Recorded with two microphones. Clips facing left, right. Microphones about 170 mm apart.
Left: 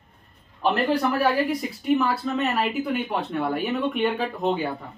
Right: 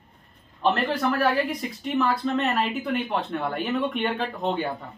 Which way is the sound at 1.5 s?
5° left (ahead or behind).